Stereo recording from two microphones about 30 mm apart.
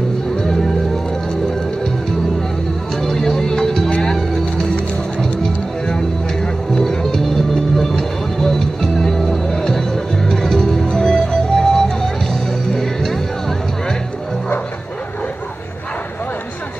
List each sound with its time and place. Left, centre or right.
0.4 s music: centre
3.0 s music: centre
6.7 s music: left
9.5 s music: left
10.9 s music: left
11.5 s music: centre